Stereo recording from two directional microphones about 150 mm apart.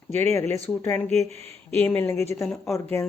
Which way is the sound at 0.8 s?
10° left (ahead or behind).